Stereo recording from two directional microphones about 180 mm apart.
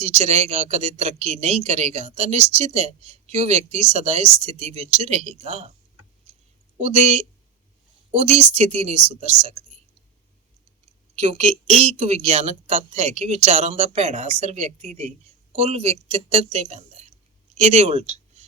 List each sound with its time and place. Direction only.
0.0 s speech: 35° right (ahead or behind)
6.3 s clicking: 35° right (ahead or behind)
6.7 s speech: 35° right (ahead or behind)
11.1 s a woman's voice: 35° right (ahead or behind)